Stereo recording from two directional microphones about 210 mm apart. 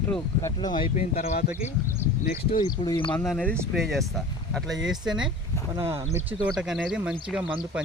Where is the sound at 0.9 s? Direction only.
30° left (ahead or behind).